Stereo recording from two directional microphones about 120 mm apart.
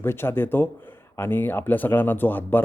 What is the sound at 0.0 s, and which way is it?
A man's voice, 20° left (ahead or behind).